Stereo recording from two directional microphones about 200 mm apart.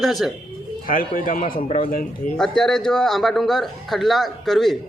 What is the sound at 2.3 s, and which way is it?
A man's voice, 5° left (ahead or behind).